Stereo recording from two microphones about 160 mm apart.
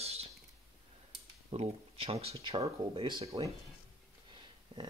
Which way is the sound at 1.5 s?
40° right (ahead or behind).